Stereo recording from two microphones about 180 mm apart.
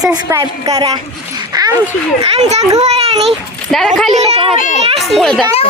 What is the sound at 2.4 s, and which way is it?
Speech, 40° right (ahead or behind).